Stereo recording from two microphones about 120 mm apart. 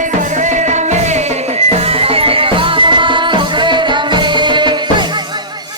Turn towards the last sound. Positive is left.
turn(degrees=-40)  # may be behind; listen again after turning